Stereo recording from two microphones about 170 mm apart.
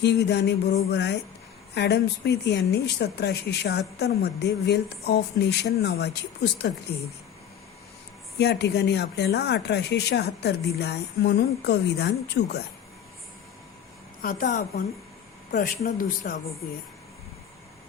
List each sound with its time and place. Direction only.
0.0 s speech: 80° left
8.4 s speech: 80° left
14.2 s a woman's voice: 55° left (ahead or behind)